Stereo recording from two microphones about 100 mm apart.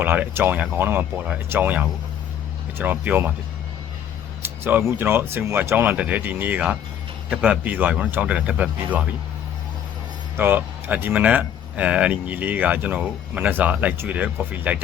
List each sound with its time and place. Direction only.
0.0 s speech: 20° right (ahead or behind)
4.4 s speech: 20° right (ahead or behind)
10.3 s speech: 20° right (ahead or behind)